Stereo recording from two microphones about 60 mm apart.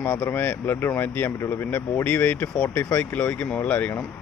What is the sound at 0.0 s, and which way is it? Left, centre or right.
A man's voice, left.